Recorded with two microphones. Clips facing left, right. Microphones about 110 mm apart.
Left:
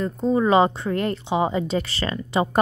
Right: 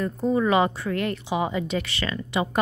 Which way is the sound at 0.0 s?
25° left (ahead or behind).